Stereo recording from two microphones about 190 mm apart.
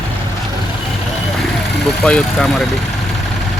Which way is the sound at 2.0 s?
5° left (ahead or behind).